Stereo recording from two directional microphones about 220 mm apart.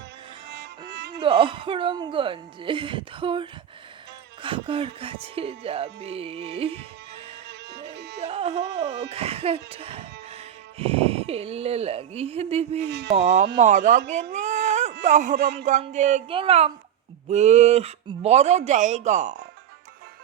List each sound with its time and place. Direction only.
0.9 s music: 50° right (ahead or behind)
1.2 s speech: 25° right (ahead or behind)
7.4 s music: 50° right (ahead or behind)
8.2 s music: 25° right (ahead or behind)
8.6 s speech: 50° right (ahead or behind)
9.1 s speech: 25° right (ahead or behind)
12.9 s speech: 50° right (ahead or behind)
13.1 s speech: 30° right (ahead or behind)
14.3 s a sound: 30° right (ahead or behind)
15.0 s speech: 35° right (ahead or behind)